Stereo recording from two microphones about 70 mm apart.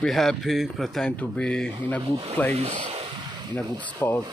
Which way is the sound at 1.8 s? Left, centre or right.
Left.